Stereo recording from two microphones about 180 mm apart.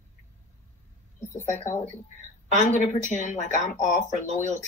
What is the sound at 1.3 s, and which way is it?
Speech, 40° left (ahead or behind).